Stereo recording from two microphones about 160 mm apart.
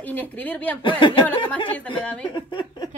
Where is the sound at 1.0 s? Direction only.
30° left (ahead or behind).